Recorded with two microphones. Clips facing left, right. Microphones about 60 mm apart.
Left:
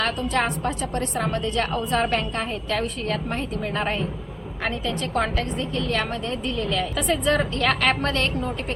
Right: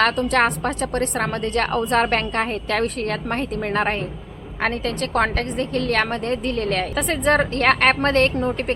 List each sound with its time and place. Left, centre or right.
0.0 s a woman's voice: right